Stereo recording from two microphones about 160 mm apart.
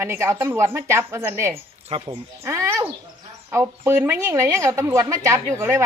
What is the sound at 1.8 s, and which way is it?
Speech, 35° right (ahead or behind).